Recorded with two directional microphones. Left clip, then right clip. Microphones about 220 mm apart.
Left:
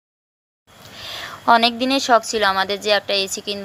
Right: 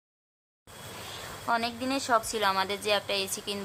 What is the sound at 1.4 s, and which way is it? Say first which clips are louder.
A woman's voice: left 14 dB; 30° left (ahead or behind).